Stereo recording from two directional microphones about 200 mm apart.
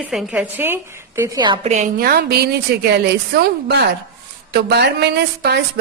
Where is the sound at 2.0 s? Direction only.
50° right (ahead or behind).